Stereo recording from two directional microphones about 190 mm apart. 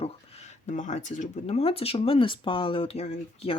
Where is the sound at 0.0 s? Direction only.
35° left (ahead or behind).